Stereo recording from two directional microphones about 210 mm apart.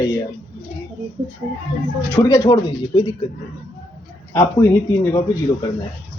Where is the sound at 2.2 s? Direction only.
15° left (ahead or behind).